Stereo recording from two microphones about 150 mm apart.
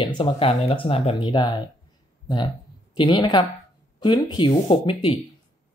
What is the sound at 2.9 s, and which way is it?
Speech, 30° left (ahead or behind).